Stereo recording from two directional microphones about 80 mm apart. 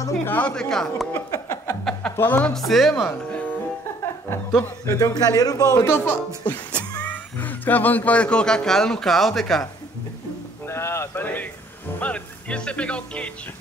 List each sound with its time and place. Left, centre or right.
0.2 s speech: left
0.5 s speech: centre
1.1 s a sound: left
2.1 s speech: left
2.4 s speech: centre
3.1 s music: centre
4.6 s speech: left
5.1 s a man's voice: left
5.9 s speech: left; by 9.7 s centre
10.6 s a sound: left
12.0 s speech: centre